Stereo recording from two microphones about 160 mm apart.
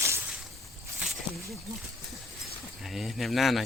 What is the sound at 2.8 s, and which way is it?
Speech, centre (ahead or behind).